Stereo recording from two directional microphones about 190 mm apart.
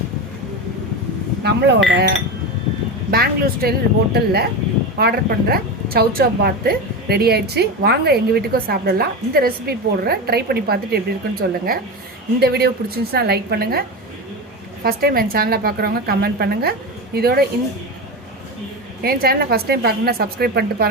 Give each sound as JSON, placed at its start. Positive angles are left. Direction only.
{"t": 1.5, "sound": "a woman's voice", "side_deg": -65}
{"t": 3.1, "sound": "a woman's voice", "side_deg": -50}
{"t": 14.8, "sound": "a woman's voice", "side_deg": -55}
{"t": 19.0, "sound": "a woman's voice", "side_deg": -55}